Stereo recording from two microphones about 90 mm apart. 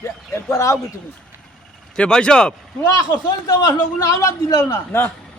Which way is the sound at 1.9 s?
10° left (ahead or behind).